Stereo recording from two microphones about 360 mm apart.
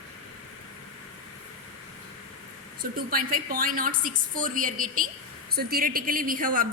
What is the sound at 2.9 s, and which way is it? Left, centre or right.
A woman's voice, right.